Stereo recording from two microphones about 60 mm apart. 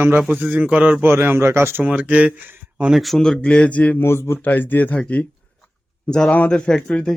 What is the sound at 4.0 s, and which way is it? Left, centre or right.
Speech, left.